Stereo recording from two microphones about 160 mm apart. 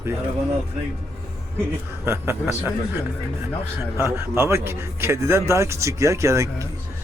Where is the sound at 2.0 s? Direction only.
15° right (ahead or behind).